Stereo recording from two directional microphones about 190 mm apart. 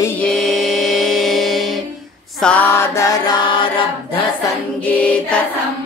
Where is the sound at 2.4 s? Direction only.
10° left (ahead or behind); by 3.8 s 25° left (ahead or behind).